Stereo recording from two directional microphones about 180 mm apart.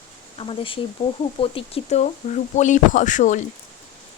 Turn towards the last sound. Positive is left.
turn(degrees=45)  # may be behind; listen again after turning